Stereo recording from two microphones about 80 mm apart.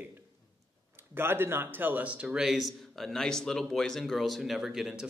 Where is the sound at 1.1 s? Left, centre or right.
Right; by 5.1 s centre.